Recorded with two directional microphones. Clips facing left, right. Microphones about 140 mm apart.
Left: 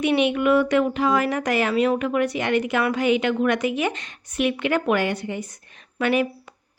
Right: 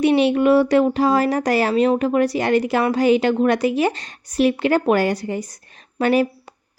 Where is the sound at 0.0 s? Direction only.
35° right (ahead or behind).